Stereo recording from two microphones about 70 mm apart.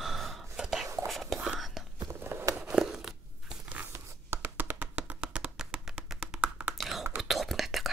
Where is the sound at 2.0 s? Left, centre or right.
Right.